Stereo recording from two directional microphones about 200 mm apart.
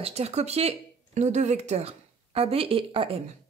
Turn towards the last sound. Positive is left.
turn(degrees=-25)  # may be behind; listen again after turning